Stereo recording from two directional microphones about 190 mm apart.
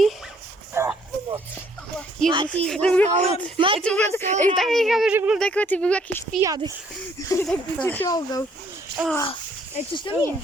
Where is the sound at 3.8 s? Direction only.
5° left (ahead or behind).